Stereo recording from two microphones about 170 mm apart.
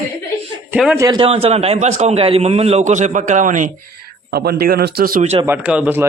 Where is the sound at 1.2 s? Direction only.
35° right (ahead or behind); by 5.2 s 65° right (ahead or behind).